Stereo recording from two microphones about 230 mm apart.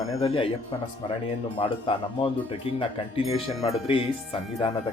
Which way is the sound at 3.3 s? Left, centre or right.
Left.